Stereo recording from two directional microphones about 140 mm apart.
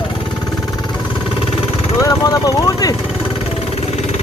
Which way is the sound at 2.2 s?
25° left (ahead or behind).